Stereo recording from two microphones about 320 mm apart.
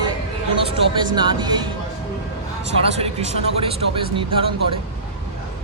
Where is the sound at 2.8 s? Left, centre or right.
Centre.